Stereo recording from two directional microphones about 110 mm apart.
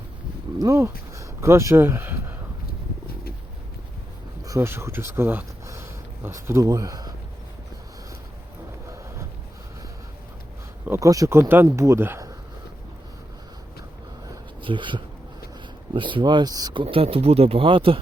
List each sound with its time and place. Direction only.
0.6 s speech: 30° right (ahead or behind)
4.4 s speech: 25° right (ahead or behind)
8.9 s a sound: 25° right (ahead or behind)
10.8 s speech: 25° right (ahead or behind)
14.6 s speech: 50° right (ahead or behind)
16.8 s speech: 60° right (ahead or behind)